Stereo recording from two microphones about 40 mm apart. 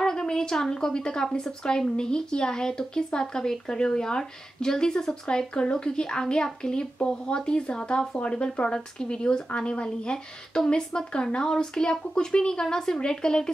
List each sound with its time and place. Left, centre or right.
0.0 s a woman's voice: centre